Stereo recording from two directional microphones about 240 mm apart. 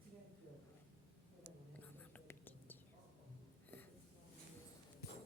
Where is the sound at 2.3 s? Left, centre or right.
Centre.